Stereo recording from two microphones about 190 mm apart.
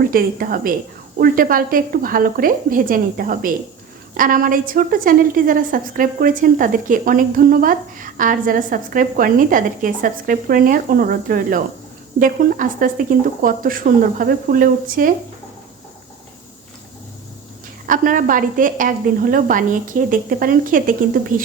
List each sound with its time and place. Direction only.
0.1 s a woman's voice: 50° right (ahead or behind)
17.8 s a woman's voice: 45° right (ahead or behind)